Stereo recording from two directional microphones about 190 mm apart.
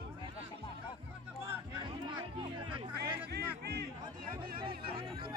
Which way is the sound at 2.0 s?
25° right (ahead or behind).